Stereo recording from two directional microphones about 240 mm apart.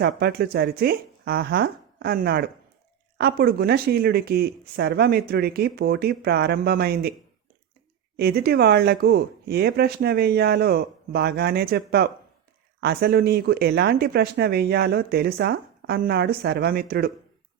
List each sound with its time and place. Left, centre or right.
0.0 s speech: right
8.1 s speech: right